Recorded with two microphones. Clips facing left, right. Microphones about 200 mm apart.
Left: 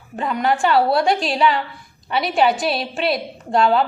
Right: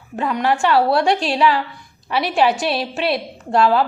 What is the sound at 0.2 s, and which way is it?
A woman's voice, centre (ahead or behind).